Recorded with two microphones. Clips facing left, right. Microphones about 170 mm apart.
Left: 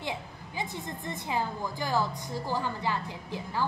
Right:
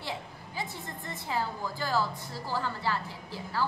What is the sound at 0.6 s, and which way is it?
A woman's voice, 20° left (ahead or behind).